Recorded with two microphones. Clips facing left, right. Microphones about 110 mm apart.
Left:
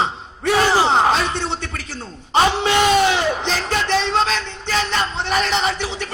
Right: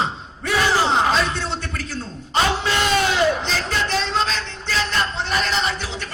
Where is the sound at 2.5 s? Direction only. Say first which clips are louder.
Left 5 dB; 65° left (ahead or behind).